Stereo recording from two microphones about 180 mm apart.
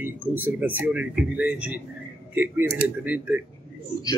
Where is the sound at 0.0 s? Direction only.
10° right (ahead or behind).